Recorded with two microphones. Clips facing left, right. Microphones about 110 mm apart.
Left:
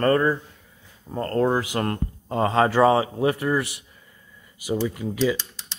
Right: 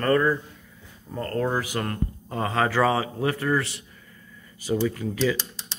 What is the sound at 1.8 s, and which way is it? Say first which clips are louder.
Speech: left 3 dB; 35° left (ahead or behind).